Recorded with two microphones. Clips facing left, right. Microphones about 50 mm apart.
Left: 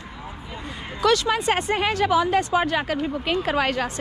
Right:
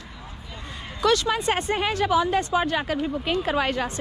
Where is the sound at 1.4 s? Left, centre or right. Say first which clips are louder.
Left 2 dB; left.